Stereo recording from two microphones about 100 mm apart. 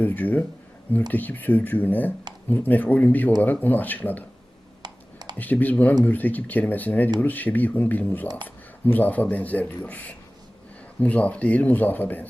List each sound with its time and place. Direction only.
0.0 s speech: 15° left (ahead or behind)
4.8 s a sound: 45° right (ahead or behind)
5.4 s speech: 15° left (ahead or behind)